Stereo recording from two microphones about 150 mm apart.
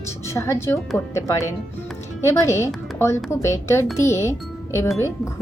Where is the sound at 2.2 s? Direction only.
20° left (ahead or behind).